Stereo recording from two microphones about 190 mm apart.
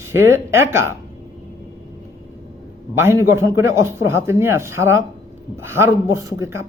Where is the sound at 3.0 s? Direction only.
15° right (ahead or behind).